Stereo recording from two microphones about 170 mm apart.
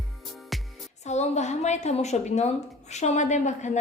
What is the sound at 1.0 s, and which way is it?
A woman's voice, 40° left (ahead or behind).